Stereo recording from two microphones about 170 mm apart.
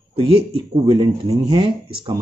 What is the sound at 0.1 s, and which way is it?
A man's voice, 35° right (ahead or behind).